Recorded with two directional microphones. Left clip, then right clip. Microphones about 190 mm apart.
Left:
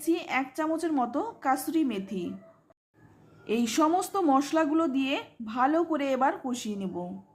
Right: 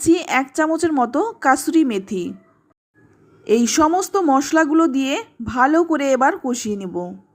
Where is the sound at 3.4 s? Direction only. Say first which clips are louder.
Right 10 dB; 30° right (ahead or behind).